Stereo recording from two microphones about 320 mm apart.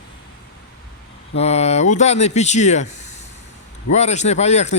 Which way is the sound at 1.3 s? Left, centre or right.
Centre.